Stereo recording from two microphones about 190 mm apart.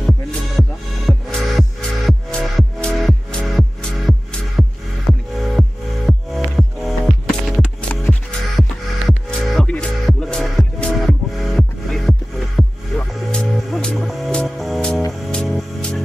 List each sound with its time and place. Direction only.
0.6 s music: centre (ahead or behind)